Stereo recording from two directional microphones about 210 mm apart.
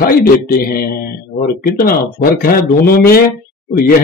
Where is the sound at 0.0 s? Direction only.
45° left (ahead or behind).